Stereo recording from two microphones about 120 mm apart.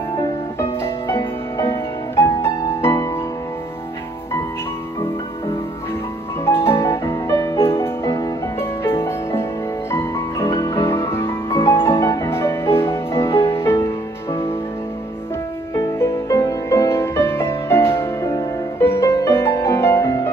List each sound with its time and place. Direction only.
0.2 s music: 25° left (ahead or behind)
6.4 s music: 20° left (ahead or behind)
15.8 s music: 25° left (ahead or behind)